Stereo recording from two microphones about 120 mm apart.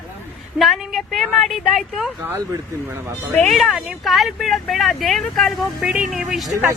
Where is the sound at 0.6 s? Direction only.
Centre (ahead or behind).